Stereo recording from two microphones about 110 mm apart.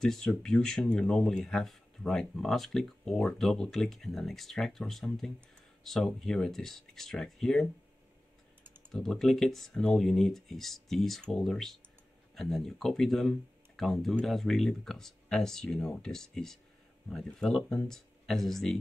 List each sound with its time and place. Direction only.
0.0 s speech: 5° left (ahead or behind)
8.9 s speech: 5° left (ahead or behind)